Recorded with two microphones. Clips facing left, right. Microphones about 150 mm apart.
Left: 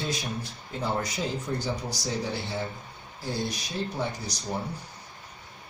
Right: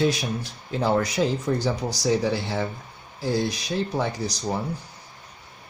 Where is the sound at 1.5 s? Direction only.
90° right.